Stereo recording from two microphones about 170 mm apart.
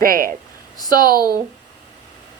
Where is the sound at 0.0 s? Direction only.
60° right (ahead or behind).